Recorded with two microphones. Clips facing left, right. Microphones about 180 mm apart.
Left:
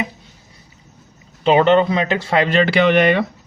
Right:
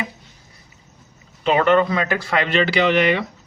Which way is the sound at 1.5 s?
25° left (ahead or behind).